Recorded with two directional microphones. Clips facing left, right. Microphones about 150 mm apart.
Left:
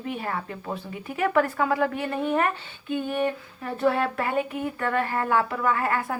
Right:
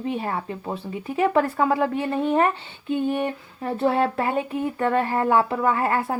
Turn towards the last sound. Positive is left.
turn(degrees=-30)  # may be behind; listen again after turning